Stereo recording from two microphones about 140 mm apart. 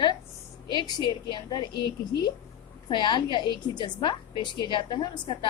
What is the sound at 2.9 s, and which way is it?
A woman's voice, 35° left (ahead or behind).